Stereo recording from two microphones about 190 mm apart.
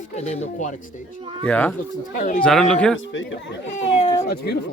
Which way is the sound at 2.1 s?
45° left (ahead or behind).